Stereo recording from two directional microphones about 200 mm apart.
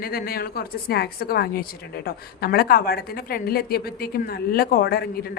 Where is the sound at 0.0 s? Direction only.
50° left (ahead or behind).